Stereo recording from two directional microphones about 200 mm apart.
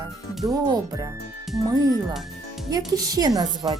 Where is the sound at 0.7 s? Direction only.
15° right (ahead or behind).